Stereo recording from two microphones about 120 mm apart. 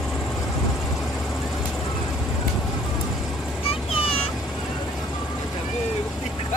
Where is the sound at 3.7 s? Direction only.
50° left (ahead or behind).